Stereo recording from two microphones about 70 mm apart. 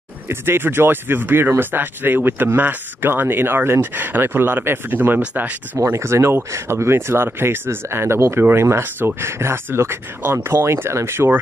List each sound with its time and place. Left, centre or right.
0.3 s speech: right
5.9 s speech: right